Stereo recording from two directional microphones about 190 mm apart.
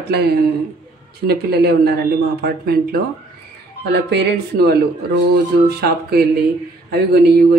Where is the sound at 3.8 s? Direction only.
60° right (ahead or behind).